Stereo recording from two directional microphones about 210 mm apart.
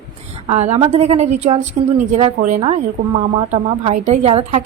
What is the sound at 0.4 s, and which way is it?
A woman's voice, 30° right (ahead or behind).